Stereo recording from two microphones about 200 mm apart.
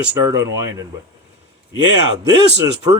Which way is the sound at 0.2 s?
15° right (ahead or behind).